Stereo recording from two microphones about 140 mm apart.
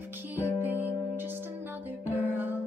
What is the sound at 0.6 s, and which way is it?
Music, 15° right (ahead or behind).